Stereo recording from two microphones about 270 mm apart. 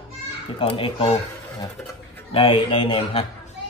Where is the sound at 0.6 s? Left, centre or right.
Centre.